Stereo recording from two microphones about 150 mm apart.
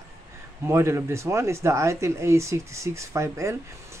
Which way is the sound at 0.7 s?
20° right (ahead or behind).